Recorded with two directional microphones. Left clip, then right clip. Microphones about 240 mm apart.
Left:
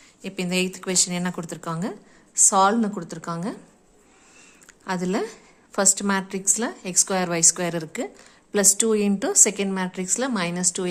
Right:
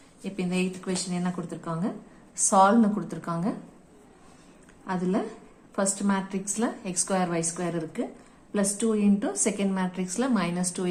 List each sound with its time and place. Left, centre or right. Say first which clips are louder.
0.2 s a woman's voice: left 5 dB; left
4.9 s a woman's voice: left 3 dB; left